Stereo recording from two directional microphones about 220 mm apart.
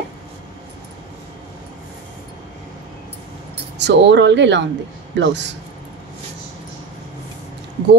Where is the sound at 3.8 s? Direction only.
50° right (ahead or behind).